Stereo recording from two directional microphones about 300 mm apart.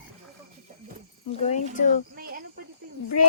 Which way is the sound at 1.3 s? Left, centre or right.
Left.